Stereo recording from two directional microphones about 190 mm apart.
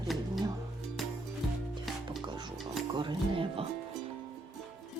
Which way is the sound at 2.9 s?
25° right (ahead or behind).